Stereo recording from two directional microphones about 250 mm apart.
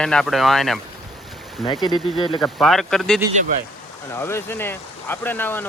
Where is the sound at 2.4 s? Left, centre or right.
Centre.